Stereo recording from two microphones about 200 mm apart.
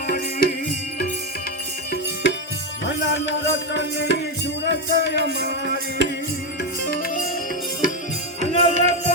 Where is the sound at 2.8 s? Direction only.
65° left (ahead or behind).